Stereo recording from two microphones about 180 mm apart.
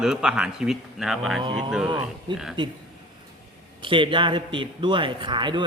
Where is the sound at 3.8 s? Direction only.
30° right (ahead or behind).